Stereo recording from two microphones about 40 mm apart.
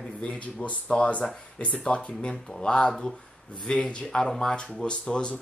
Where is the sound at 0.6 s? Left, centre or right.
Left.